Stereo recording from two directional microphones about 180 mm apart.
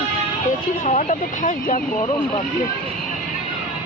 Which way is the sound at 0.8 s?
45° left (ahead or behind).